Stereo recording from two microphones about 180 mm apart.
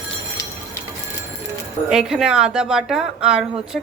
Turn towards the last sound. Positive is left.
turn(degrees=-5)  # may be behind; listen again after turning